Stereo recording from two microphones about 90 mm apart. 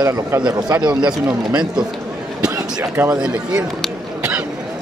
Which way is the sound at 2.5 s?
25° right (ahead or behind).